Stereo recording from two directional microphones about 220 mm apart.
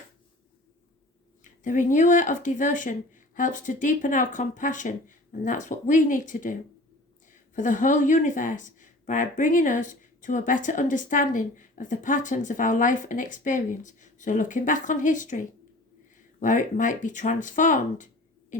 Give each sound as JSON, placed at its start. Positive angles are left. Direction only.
{"t": 1.6, "sound": "speech", "side_deg": 35}